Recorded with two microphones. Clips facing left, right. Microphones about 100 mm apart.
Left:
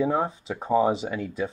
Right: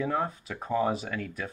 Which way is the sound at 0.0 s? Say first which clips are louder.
Left 5 dB; 20° left (ahead or behind).